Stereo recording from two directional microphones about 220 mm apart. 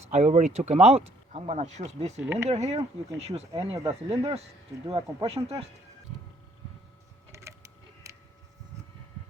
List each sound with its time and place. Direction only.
0.1 s speech: 30° right (ahead or behind)
2.2 s speech: 10° right (ahead or behind)
2.5 s speech: 30° right (ahead or behind)
3.5 s speech: 15° right (ahead or behind)
4.2 s speech: 25° right (ahead or behind)
7.3 s a sound: 15° right (ahead or behind)